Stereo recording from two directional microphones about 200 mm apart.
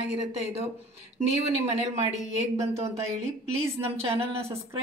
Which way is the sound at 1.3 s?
35° right (ahead or behind).